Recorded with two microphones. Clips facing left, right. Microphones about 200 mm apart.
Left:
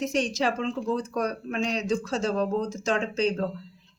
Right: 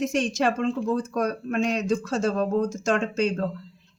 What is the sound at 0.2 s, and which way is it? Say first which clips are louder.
Speech: right 2 dB; 50° right (ahead or behind).